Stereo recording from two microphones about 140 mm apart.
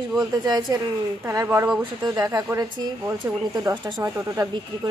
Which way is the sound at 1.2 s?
20° right (ahead or behind).